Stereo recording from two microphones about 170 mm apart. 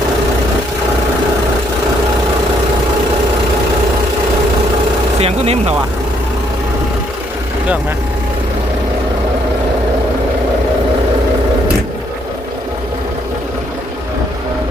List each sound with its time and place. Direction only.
5.2 s speech: 35° right (ahead or behind)